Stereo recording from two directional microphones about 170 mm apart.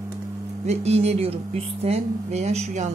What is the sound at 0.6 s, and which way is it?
Speech, 40° right (ahead or behind).